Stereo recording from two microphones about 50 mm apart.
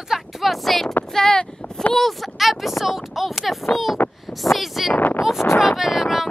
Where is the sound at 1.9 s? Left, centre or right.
Centre.